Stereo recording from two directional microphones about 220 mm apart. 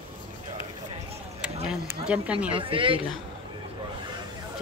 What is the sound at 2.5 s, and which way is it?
Speech, 25° right (ahead or behind).